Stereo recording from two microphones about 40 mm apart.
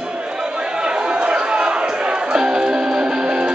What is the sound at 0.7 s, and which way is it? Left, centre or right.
Music, centre.